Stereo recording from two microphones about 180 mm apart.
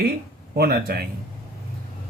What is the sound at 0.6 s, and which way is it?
Speech, 60° right (ahead or behind).